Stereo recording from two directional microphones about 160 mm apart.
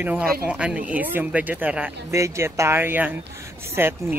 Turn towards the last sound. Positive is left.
turn(degrees=-15)  # may be behind; listen again after turning